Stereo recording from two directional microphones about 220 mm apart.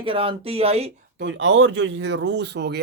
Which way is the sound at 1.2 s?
55° right (ahead or behind).